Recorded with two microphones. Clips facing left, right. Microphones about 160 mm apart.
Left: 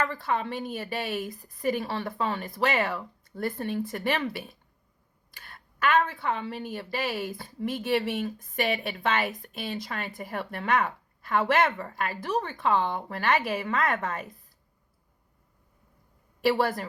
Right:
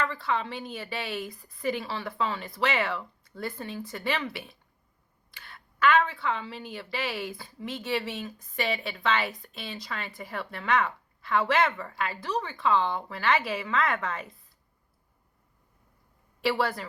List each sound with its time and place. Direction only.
0.0 s a woman's voice: 50° left (ahead or behind)
16.4 s a woman's voice: 50° left (ahead or behind)